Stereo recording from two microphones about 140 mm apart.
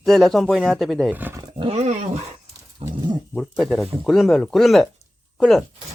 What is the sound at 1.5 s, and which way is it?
Roaring cats, 45° right (ahead or behind).